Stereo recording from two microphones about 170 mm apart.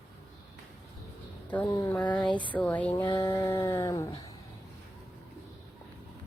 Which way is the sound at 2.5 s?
10° left (ahead or behind).